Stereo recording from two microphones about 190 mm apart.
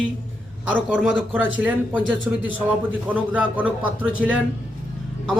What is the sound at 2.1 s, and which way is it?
Speech, 90° right.